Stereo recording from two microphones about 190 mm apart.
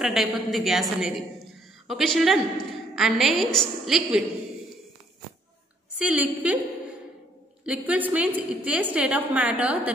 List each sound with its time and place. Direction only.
0.0 s a woman's voice: centre (ahead or behind)
5.9 s a woman's voice: 5° right (ahead or behind)
7.6 s a woman's voice: 5° right (ahead or behind)